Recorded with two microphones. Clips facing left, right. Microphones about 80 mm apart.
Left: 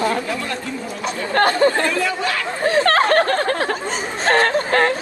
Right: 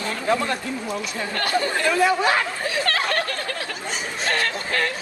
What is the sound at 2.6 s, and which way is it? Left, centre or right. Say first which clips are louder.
Speech: left 8 dB; left.